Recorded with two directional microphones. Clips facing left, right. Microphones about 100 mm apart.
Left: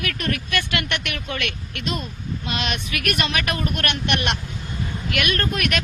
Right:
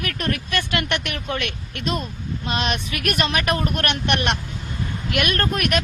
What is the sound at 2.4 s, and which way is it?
Speech, 40° right (ahead or behind).